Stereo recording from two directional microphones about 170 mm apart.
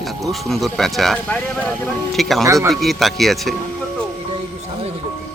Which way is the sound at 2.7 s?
Centre (ahead or behind).